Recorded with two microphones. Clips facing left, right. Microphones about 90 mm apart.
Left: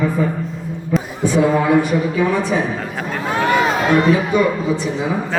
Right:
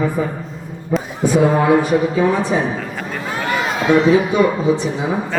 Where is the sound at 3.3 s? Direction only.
20° left (ahead or behind).